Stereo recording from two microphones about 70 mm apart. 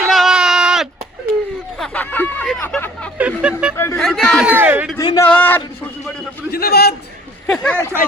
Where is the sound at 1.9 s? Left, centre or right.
Left.